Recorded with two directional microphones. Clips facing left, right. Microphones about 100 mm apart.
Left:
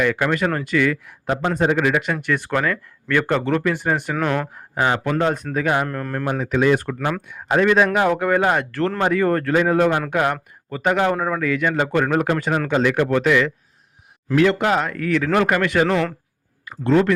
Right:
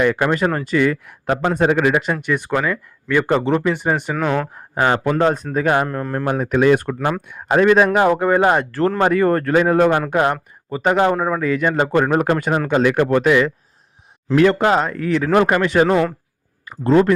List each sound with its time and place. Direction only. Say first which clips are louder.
0.0 s speech: right 3 dB; 30° right (ahead or behind)
1.0 s a man's voice: right 3 dB; 60° right (ahead or behind)
1.8 s speech: right 3 dB; 35° right (ahead or behind)
2.2 s speech: right 2 dB; 15° right (ahead or behind)
4.1 s speech: right 2 dB; 5° right (ahead or behind)
4.5 s speech: right 3 dB; 35° right (ahead or behind)
5.9 s speech: right 3 dB; 25° right (ahead or behind)
6.2 s speech: right 3 dB; 50° right (ahead or behind)
8.1 s speech: right 3 dB; 30° right (ahead or behind)
9.0 s speech: right 3 dB; 45° right (ahead or behind)
10.1 s speech: right 3 dB; 30° right (ahead or behind)
11.1 s speech: right 2 dB; 15° right (ahead or behind)
11.3 s speech: right 2 dB; 30° right (ahead or behind)